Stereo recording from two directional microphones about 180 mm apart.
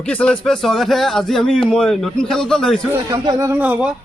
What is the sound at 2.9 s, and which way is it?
Speech, 15° right (ahead or behind).